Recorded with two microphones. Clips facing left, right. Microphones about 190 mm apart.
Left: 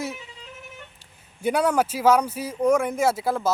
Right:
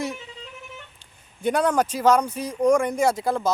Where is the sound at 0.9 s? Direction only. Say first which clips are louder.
Even; 10° left (ahead or behind).